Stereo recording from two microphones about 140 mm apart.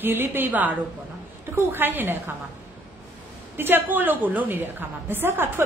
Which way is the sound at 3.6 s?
15° right (ahead or behind).